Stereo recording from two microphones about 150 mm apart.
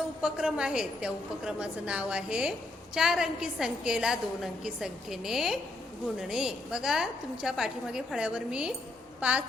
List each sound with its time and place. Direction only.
0.2 s a woman's voice: 5° right (ahead or behind)